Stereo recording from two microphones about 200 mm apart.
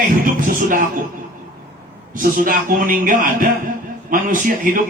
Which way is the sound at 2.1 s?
45° right (ahead or behind).